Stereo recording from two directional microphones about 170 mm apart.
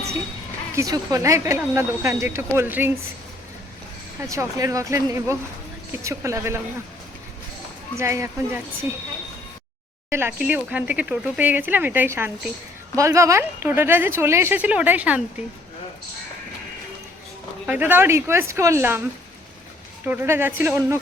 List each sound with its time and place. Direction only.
0.8 s speech: 20° right (ahead or behind)
4.3 s speech: 20° right (ahead or behind)
7.9 s speech: 15° right (ahead or behind)
10.1 s speech: 15° right (ahead or behind)
17.7 s speech: 10° right (ahead or behind)
20.1 s speech: 15° right (ahead or behind)